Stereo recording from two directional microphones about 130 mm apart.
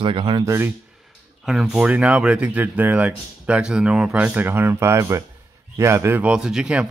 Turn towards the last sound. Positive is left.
turn(degrees=-5)  # may be behind; listen again after turning